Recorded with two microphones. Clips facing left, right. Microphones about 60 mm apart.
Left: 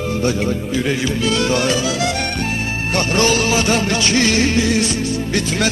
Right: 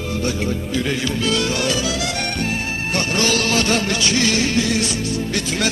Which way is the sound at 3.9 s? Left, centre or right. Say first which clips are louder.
Left 3 dB; left.